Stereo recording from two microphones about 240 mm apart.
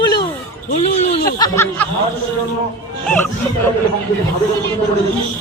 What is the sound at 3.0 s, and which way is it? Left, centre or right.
Speech, centre.